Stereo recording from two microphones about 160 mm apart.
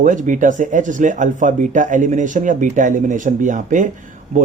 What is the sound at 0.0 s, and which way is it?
Speech, 50° right (ahead or behind).